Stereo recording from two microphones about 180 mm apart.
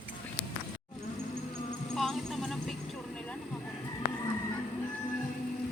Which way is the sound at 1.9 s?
Centre (ahead or behind).